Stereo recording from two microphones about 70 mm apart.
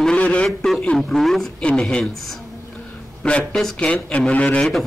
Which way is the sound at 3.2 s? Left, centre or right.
Centre.